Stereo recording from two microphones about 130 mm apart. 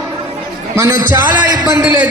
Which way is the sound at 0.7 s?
20° right (ahead or behind).